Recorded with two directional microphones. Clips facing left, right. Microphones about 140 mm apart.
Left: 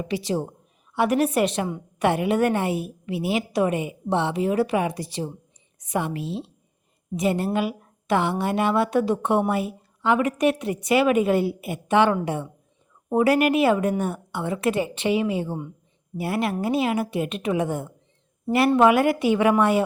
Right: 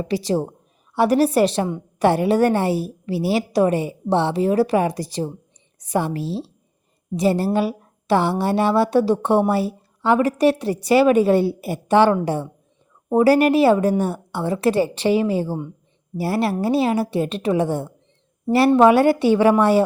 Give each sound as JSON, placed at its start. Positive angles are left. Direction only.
{"t": 0.0, "sound": "a woman's voice", "side_deg": -35}